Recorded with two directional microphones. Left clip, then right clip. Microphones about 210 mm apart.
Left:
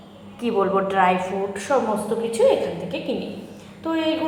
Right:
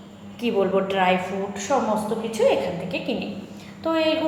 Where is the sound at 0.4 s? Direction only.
5° right (ahead or behind).